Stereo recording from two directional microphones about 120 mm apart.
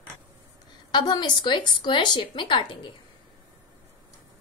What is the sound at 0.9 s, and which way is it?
A woman's voice, 35° left (ahead or behind).